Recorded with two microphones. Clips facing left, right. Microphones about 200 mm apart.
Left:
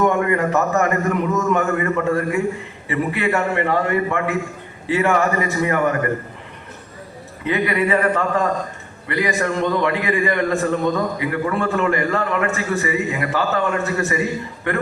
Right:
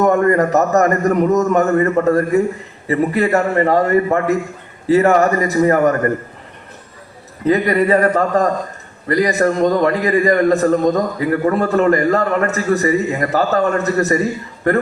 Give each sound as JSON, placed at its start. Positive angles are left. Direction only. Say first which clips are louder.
{"t": 0.0, "sound": "a man's voice", "louder": "right 5 dB", "side_deg": -40}
{"t": 7.4, "sound": "a man's voice", "louder": "right 5 dB", "side_deg": -40}